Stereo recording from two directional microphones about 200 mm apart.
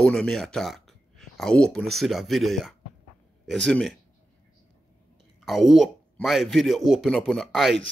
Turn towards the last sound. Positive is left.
turn(degrees=0)  # may be behind; listen again after turning